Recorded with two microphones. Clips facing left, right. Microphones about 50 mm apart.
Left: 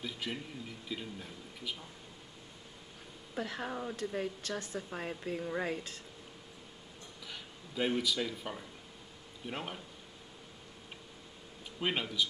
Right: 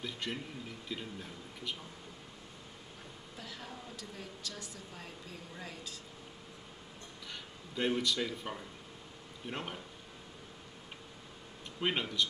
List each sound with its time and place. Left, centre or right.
0.0 s speech: centre
3.3 s speech: left
7.2 s speech: centre
11.8 s speech: centre